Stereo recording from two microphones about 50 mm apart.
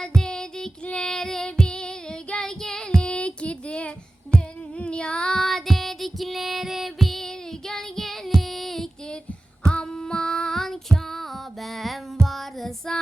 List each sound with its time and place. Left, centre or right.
0.2 s child singing: centre
3.0 s child singing: left
4.4 s music: left; by 7.3 s centre
7.7 s child singing: centre
9.6 s music: centre